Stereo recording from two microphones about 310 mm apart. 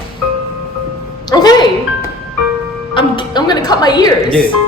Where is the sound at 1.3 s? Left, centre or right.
Centre.